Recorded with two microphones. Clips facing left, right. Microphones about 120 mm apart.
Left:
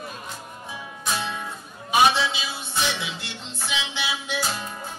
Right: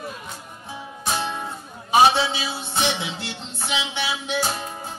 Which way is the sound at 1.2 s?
30° right (ahead or behind).